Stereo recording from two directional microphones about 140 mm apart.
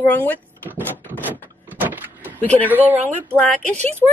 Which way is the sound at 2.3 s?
10° left (ahead or behind).